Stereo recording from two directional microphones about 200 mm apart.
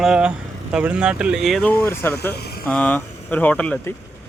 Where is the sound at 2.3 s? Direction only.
50° left (ahead or behind).